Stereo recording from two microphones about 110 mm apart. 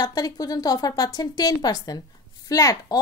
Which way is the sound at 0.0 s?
40° left (ahead or behind).